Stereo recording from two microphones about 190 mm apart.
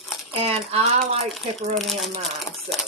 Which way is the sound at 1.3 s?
Centre (ahead or behind).